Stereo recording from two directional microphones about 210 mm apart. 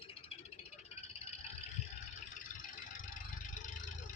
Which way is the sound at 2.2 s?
40° left (ahead or behind).